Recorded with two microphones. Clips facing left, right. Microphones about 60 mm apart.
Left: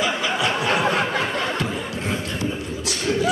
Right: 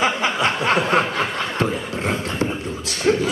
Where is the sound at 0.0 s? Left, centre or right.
Right.